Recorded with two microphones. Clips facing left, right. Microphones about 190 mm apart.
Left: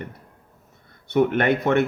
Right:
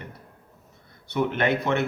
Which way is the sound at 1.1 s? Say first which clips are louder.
Left 5 dB; 50° left (ahead or behind).